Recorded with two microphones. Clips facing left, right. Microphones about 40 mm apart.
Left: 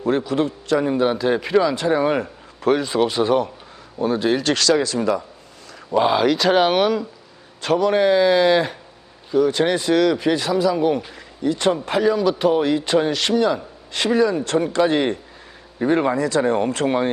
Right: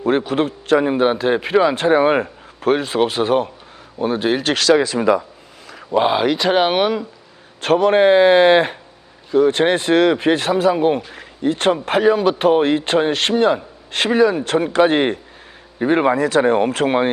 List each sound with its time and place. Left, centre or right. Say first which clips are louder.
0.2 s a man's voice: right 2 dB; right
1.7 s a man's voice: right 4 dB; right
2.2 s a sound: right 1 dB; centre
2.7 s speech: right 1 dB; right
7.6 s a man's voice: right 4 dB; right
15.8 s speech: right 2 dB; right
16.0 s a man's voice: right 4 dB; right